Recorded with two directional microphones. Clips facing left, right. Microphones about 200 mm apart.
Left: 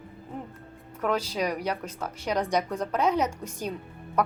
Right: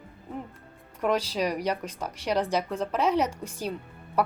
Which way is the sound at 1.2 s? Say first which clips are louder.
Even; 10° left (ahead or behind).